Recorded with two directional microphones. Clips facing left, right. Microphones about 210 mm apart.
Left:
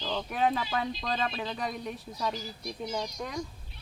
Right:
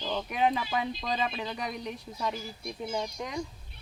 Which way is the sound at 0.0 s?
10° right (ahead or behind).